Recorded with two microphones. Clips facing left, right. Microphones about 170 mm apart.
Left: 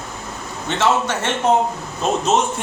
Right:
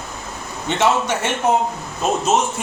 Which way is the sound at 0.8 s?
15° right (ahead or behind).